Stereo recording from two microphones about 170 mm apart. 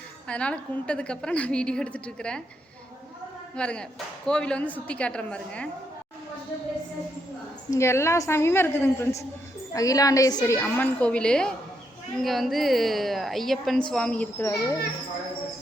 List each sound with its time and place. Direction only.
0.3 s a woman's voice: 5° left (ahead or behind)
3.5 s a woman's voice: 5° left (ahead or behind)
7.7 s a woman's voice: 15° left (ahead or behind)